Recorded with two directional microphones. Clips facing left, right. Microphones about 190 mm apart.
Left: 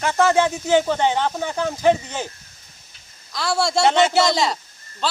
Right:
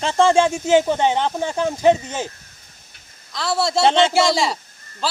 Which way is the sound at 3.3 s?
Centre (ahead or behind).